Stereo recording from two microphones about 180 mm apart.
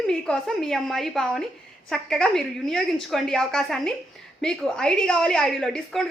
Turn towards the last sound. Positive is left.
turn(degrees=5)  # may be behind; listen again after turning